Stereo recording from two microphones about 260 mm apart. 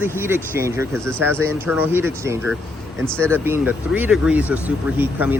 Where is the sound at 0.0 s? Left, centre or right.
Centre.